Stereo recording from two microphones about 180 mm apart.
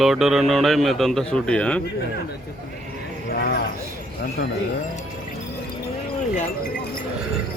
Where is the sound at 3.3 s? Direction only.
60° left (ahead or behind).